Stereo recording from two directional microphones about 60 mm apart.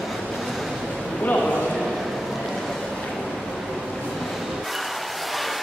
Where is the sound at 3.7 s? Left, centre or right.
Centre.